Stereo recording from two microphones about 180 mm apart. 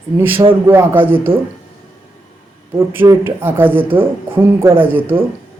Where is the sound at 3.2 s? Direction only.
10° right (ahead or behind).